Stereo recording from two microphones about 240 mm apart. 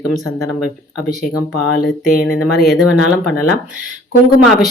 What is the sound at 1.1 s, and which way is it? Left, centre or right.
Speech, centre.